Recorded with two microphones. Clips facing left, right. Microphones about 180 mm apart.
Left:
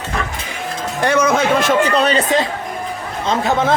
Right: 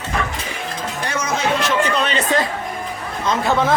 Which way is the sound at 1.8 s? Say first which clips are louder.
Left 4 dB; 35° left (ahead or behind).